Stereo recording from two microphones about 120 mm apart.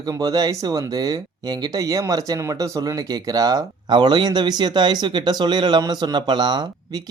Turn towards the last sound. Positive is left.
turn(degrees=-40)  # may be behind; listen again after turning